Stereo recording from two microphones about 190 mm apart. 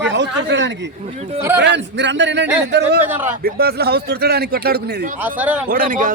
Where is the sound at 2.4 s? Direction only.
10° right (ahead or behind).